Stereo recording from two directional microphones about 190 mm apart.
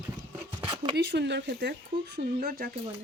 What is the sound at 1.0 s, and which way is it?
Speech, 65° right (ahead or behind).